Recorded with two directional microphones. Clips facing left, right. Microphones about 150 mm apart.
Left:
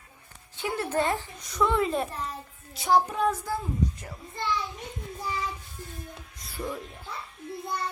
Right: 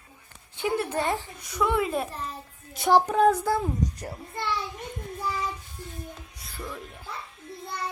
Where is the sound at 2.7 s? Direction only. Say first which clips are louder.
Right 3 dB; 65° right (ahead or behind).